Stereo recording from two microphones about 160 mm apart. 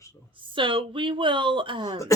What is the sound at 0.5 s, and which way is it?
Speech, 30° right (ahead or behind).